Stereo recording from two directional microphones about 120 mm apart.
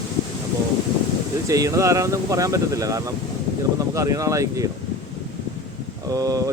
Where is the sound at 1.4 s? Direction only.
30° right (ahead or behind).